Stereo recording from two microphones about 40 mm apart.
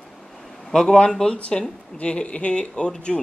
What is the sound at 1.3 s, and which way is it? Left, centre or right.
Speech, left.